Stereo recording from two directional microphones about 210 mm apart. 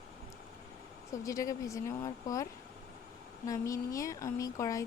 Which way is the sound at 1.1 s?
15° left (ahead or behind).